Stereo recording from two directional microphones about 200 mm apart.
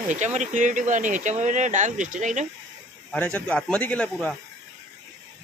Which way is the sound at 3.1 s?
5° left (ahead or behind).